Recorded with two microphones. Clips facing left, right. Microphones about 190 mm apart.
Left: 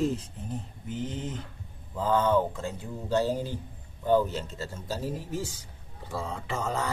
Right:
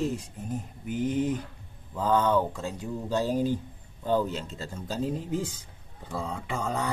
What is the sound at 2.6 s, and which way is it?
Speech, 15° right (ahead or behind).